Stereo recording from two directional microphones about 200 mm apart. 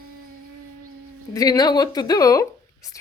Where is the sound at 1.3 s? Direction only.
20° left (ahead or behind).